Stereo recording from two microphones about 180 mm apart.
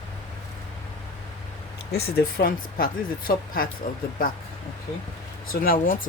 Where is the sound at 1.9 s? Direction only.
60° left (ahead or behind).